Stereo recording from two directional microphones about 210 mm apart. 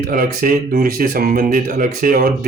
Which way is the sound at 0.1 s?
45° right (ahead or behind).